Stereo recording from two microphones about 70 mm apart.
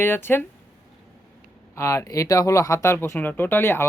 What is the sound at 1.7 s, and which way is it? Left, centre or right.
Speech, left.